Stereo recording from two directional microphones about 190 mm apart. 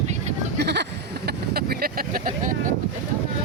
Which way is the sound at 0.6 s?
60° right (ahead or behind).